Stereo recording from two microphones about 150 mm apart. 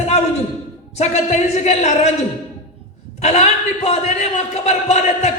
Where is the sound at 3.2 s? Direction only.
50° left (ahead or behind).